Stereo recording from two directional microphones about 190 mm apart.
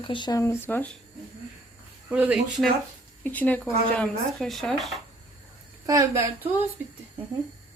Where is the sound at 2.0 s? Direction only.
10° right (ahead or behind).